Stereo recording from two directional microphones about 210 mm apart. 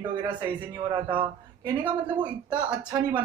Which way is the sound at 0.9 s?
25° right (ahead or behind).